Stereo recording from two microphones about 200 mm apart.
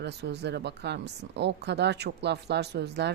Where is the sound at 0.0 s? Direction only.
55° right (ahead or behind).